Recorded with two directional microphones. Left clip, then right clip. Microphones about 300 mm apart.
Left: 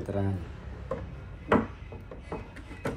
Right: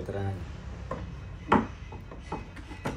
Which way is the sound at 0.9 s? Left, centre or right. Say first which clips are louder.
Left 2 dB; centre.